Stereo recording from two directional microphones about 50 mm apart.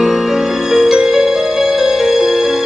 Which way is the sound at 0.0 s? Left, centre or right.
Centre.